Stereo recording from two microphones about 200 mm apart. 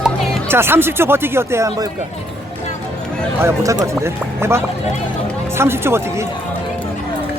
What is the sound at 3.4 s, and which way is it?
Speech, 15° right (ahead or behind).